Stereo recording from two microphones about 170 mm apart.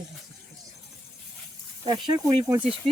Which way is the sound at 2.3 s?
25° right (ahead or behind).